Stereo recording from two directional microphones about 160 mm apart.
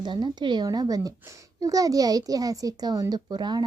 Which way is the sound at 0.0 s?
25° right (ahead or behind).